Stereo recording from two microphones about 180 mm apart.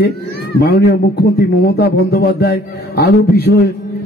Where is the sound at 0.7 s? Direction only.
60° left (ahead or behind).